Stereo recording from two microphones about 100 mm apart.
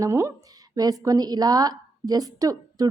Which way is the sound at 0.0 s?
30° right (ahead or behind).